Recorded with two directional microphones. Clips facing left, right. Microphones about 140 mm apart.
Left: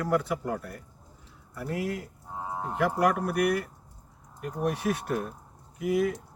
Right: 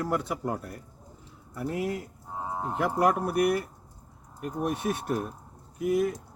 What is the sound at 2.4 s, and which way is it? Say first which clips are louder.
Cattle: right 1 dB; 10° right (ahead or behind).